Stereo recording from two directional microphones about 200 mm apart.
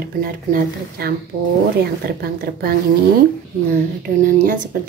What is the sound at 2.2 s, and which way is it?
Speech, 50° right (ahead or behind).